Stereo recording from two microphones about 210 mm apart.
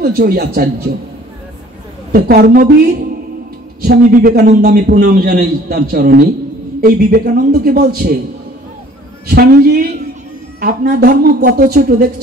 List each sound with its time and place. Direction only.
0.0 s a man's voice: 45° right (ahead or behind)
2.1 s a man's voice: 45° right (ahead or behind)
9.3 s a man's voice: 50° right (ahead or behind)